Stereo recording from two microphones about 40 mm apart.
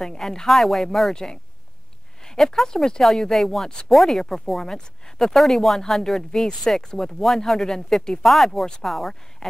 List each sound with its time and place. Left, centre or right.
0.0 s speech: centre
0.5 s speech: centre
1.1 s speech: centre
2.2 s a sound: centre
2.5 s speech: centre
8.2 s speech: centre